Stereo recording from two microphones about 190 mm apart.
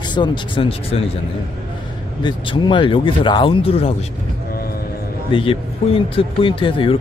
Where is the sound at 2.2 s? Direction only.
25° left (ahead or behind).